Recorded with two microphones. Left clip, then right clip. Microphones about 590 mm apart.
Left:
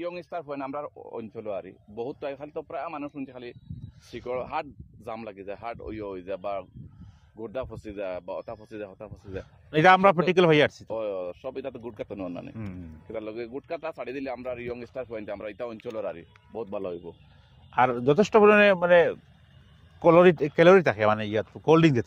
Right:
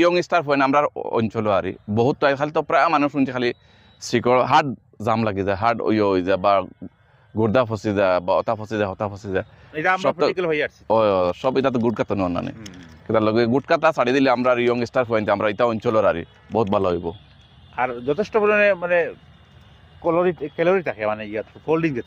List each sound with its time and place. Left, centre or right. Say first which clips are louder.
0.0 s speech: right 16 dB; right
10.3 s speech: left 2 dB; left
10.9 s speech: right 14 dB; right
17.7 s speech: left 1 dB; left